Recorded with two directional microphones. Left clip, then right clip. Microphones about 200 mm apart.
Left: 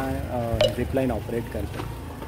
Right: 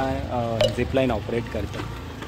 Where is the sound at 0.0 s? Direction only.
20° right (ahead or behind).